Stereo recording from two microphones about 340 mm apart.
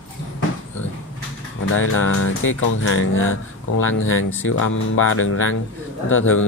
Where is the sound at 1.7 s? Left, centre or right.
Left.